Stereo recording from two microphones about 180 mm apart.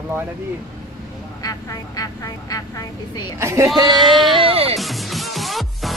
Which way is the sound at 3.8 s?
Centre (ahead or behind).